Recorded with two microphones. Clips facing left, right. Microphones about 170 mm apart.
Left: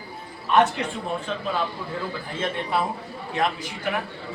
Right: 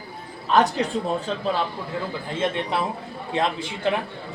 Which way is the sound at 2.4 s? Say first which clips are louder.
Right 1 dB; 20° right (ahead or behind).